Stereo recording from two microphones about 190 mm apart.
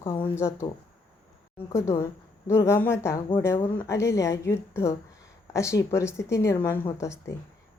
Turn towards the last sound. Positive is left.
turn(degrees=15)  # may be behind; listen again after turning